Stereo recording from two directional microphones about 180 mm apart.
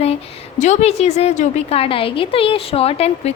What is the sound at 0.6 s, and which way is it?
A woman's voice, 40° left (ahead or behind).